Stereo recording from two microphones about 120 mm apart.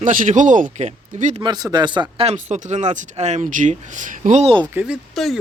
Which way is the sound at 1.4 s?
35° right (ahead or behind).